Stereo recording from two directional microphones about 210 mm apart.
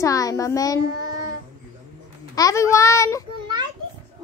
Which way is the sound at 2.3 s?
15° left (ahead or behind).